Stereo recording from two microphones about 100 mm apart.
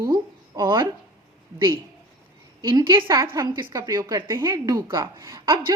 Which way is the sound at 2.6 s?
50° right (ahead or behind).